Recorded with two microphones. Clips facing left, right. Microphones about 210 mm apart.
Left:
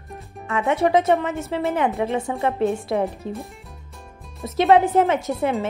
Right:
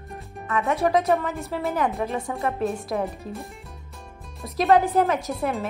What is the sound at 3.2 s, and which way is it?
Speech, 30° left (ahead or behind).